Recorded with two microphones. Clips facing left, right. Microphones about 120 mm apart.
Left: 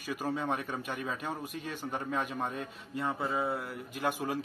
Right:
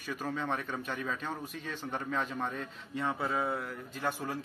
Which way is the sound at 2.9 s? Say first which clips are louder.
Even; centre (ahead or behind).